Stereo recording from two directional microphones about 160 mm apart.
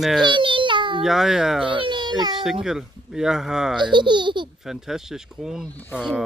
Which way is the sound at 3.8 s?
30° right (ahead or behind).